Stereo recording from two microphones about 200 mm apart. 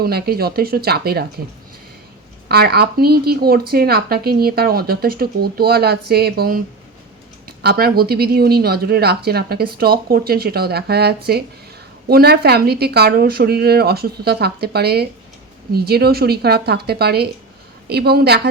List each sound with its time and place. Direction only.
0.0 s speech: 50° right (ahead or behind)
2.5 s speech: 50° right (ahead or behind)